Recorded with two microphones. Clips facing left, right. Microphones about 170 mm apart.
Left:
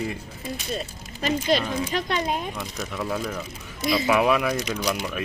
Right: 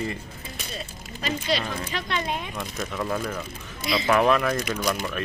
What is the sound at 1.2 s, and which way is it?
Speech, 50° left (ahead or behind).